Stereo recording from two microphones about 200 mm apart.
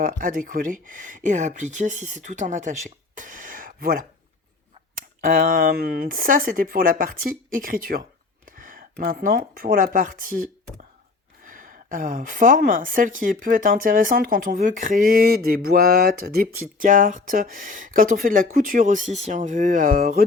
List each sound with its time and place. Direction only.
0.0 s speech: 45° right (ahead or behind)
3.2 s a sound: 40° right (ahead or behind)
5.2 s a woman's voice: 45° right (ahead or behind)